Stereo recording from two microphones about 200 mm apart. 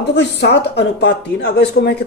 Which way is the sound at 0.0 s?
60° left (ahead or behind).